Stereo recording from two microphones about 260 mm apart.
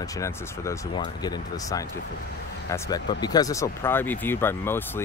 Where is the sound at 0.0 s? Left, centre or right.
Centre.